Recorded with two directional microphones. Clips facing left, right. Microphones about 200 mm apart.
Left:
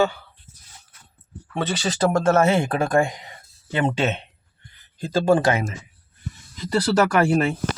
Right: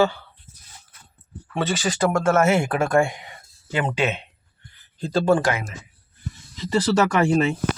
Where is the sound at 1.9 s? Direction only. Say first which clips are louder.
Left 2 dB; 30° left (ahead or behind).